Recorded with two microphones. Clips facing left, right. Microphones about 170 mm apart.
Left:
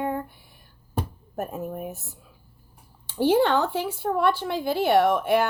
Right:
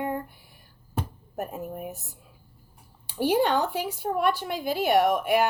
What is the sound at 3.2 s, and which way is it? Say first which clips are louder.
Speech: left 3 dB; 15° right (ahead or behind).